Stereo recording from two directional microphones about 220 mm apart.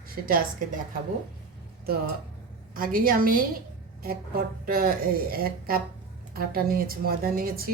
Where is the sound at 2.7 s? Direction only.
40° right (ahead or behind).